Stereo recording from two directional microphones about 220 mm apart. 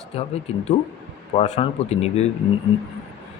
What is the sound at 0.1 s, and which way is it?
Speech, 25° left (ahead or behind).